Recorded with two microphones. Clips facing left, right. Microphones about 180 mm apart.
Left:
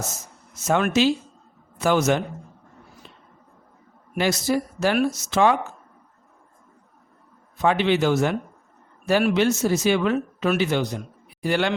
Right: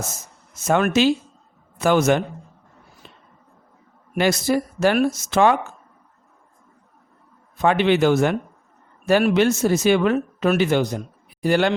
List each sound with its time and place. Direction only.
0.7 s a man's voice: 55° right (ahead or behind)
3.0 s a sound: 55° right (ahead or behind)
4.1 s speech: 55° right (ahead or behind)
7.6 s a man's voice: 55° right (ahead or behind)